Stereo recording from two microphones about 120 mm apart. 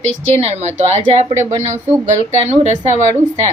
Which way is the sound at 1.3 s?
25° right (ahead or behind).